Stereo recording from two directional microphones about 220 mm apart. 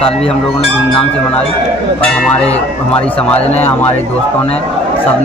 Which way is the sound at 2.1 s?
Centre (ahead or behind).